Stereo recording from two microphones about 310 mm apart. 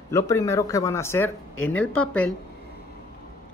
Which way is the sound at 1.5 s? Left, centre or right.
Left.